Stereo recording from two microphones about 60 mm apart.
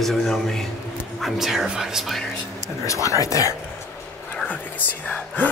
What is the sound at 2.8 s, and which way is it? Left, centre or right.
Speech, left.